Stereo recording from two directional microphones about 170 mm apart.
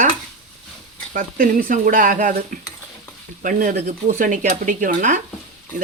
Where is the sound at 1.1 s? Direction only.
50° right (ahead or behind).